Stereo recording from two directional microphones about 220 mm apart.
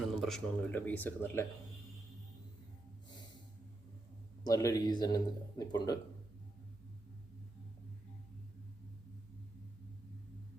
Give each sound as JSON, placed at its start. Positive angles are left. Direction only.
{"t": 0.1, "sound": "a man's voice", "side_deg": 0}
{"t": 4.4, "sound": "a man's voice", "side_deg": 15}